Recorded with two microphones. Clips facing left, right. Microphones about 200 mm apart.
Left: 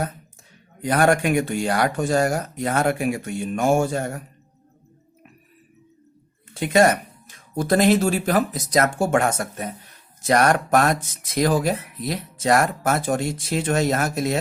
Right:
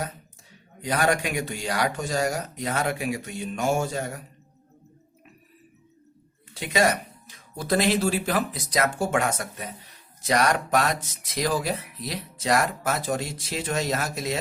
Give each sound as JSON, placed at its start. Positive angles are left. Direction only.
{"t": 0.8, "sound": "speech", "side_deg": 50}
{"t": 6.5, "sound": "speech", "side_deg": 50}